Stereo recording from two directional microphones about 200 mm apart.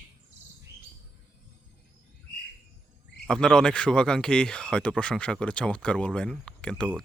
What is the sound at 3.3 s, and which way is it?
Speech, 5° left (ahead or behind).